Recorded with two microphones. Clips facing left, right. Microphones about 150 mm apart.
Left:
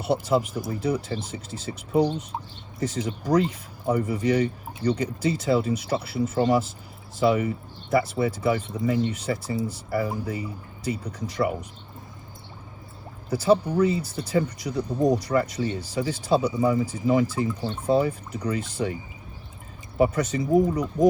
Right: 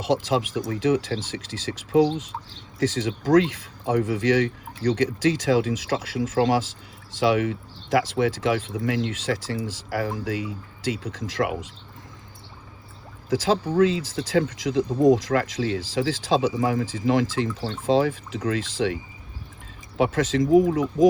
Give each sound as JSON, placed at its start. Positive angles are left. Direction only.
{"t": 0.0, "sound": "speech", "side_deg": -90}
{"t": 13.3, "sound": "speech", "side_deg": -90}
{"t": 20.0, "sound": "speech", "side_deg": -90}